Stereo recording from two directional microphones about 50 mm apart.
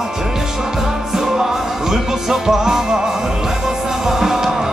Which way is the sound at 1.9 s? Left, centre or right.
Centre.